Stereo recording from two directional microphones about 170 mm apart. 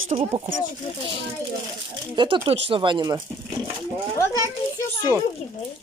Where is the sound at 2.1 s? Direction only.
30° right (ahead or behind).